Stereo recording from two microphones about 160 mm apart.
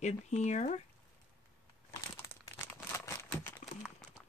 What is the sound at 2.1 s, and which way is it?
Crumpling, 15° left (ahead or behind).